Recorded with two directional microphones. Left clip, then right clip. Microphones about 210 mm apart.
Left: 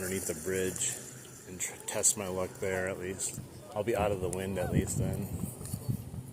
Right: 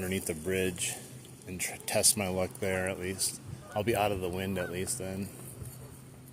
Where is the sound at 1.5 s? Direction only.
40° right (ahead or behind).